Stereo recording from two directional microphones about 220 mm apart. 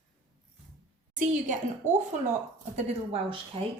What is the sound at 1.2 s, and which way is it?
A woman's voice, 35° right (ahead or behind).